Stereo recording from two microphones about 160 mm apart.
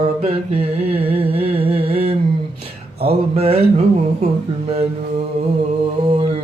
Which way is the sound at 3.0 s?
40° right (ahead or behind).